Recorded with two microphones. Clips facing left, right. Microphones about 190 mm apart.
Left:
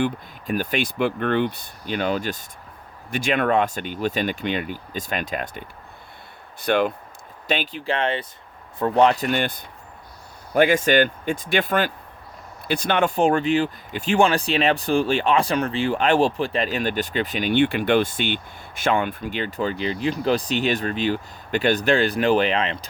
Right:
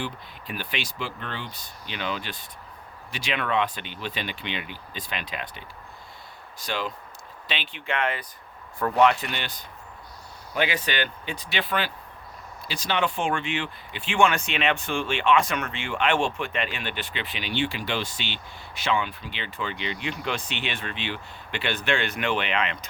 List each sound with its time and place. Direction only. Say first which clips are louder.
0.0 s speech: left 10 dB; 45° left (ahead or behind)
6.6 s speech: left 10 dB; 60° left (ahead or behind)
7.4 s speech: left 8 dB; 45° left (ahead or behind)